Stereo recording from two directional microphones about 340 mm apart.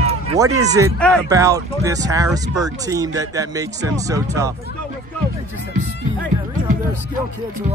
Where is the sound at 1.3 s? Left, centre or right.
Centre.